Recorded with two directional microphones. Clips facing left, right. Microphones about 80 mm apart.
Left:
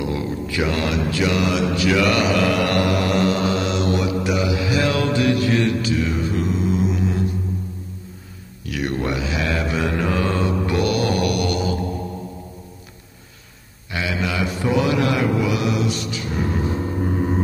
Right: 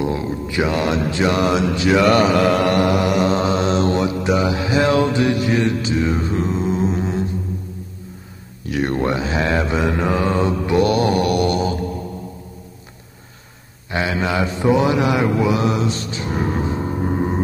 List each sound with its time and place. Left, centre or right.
0.0 s speech: right
8.6 s speech: right
13.8 s speech: right